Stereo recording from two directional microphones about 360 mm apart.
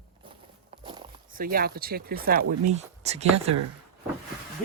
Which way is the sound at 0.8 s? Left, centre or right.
Centre.